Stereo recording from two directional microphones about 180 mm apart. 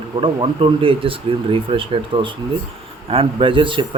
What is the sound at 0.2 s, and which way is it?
Speech, 30° right (ahead or behind).